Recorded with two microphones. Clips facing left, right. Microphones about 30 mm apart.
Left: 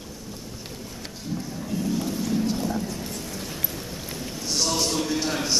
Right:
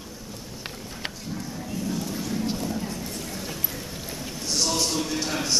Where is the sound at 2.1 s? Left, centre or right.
Centre.